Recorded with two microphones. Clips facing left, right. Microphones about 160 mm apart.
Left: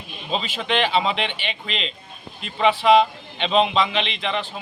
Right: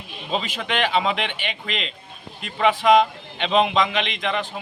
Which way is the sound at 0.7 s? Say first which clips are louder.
Left 1 dB; 10° right (ahead or behind).